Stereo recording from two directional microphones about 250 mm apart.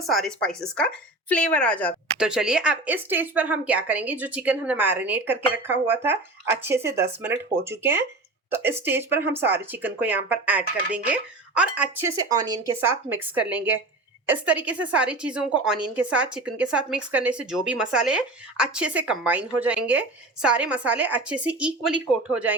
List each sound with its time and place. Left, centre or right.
0.0 s a woman's voice: centre